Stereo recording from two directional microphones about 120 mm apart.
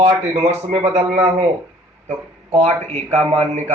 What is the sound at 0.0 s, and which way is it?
Speech, 60° right (ahead or behind).